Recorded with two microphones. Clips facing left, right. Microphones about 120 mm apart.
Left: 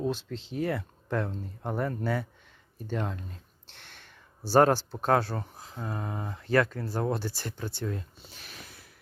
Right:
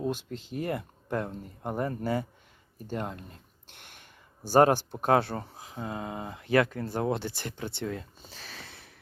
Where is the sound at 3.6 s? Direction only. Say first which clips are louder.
Even; 50° right (ahead or behind).